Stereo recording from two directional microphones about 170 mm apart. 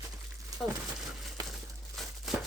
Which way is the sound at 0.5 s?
20° right (ahead or behind).